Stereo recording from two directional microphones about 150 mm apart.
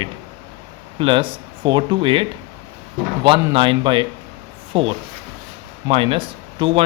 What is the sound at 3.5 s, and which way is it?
Speech, 35° right (ahead or behind).